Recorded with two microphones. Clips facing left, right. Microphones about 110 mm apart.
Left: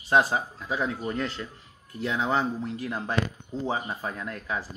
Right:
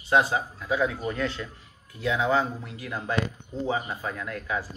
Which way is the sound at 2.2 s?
30° left (ahead or behind).